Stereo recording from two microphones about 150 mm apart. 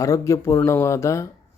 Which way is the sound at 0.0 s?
20° left (ahead or behind).